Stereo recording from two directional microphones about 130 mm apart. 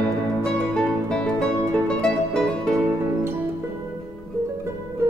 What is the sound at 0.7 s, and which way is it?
Music, 5° left (ahead or behind).